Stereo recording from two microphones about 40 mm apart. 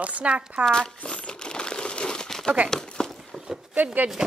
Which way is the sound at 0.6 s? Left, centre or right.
Centre.